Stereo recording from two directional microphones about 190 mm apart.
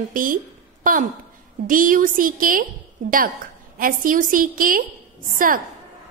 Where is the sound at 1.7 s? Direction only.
45° right (ahead or behind).